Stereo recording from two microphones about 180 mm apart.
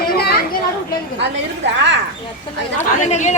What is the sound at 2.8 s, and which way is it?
Speech, 40° left (ahead or behind).